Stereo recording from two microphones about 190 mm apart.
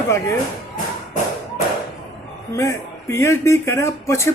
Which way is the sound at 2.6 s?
15° left (ahead or behind).